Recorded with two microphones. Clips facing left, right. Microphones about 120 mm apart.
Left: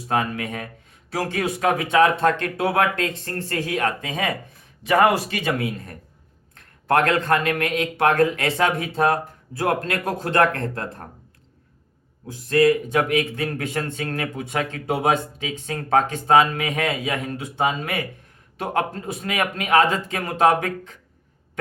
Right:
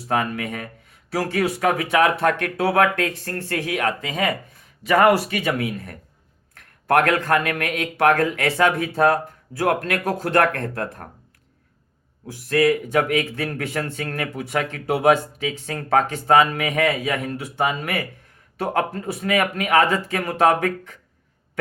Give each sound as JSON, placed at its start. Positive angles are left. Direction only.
{"t": 0.1, "sound": "a man's voice", "side_deg": 25}
{"t": 12.3, "sound": "a man's voice", "side_deg": 20}